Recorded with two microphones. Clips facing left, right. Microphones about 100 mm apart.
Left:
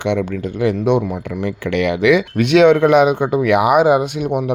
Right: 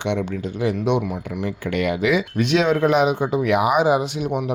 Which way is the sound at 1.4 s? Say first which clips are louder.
Left 4 dB; 85° left.